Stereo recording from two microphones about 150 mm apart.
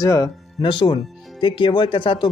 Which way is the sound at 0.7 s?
30° left (ahead or behind).